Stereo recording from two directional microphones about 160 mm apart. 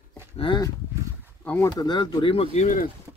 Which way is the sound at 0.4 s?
30° left (ahead or behind).